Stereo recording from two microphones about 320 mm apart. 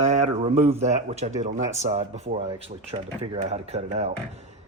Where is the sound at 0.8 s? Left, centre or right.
Right.